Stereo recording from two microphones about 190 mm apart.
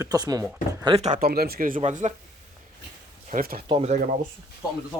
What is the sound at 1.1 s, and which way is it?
Speech, 55° right (ahead or behind).